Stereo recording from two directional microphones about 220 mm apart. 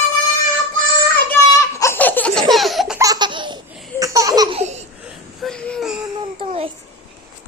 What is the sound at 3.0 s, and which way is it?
Laughter, 20° right (ahead or behind).